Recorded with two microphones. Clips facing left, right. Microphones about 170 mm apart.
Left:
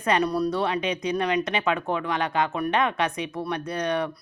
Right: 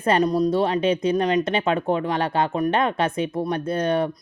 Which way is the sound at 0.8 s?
30° right (ahead or behind).